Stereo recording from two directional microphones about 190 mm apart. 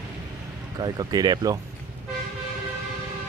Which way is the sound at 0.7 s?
20° right (ahead or behind).